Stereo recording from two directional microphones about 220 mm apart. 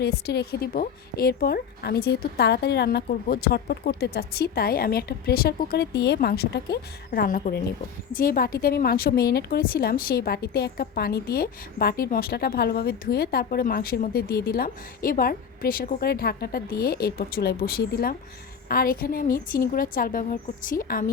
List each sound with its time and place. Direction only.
0.0 s a woman's voice: 45° left (ahead or behind)